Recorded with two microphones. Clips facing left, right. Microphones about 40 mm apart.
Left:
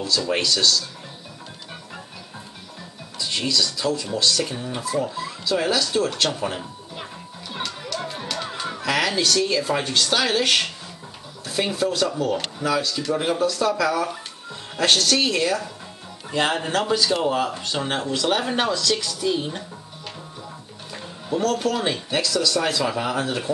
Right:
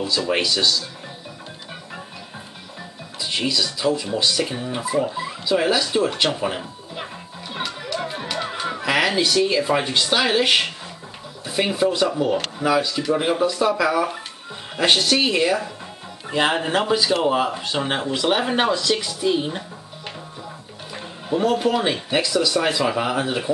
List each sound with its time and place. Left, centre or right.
0.0 s speech: centre
3.2 s speech: centre
7.5 s music: centre
11.4 s speech: centre
20.9 s speech: centre